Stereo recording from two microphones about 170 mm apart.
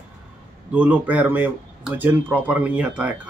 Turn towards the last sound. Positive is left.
turn(degrees=-10)  # may be behind; listen again after turning